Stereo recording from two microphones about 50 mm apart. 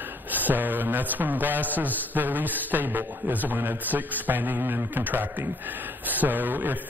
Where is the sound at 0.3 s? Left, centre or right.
Right.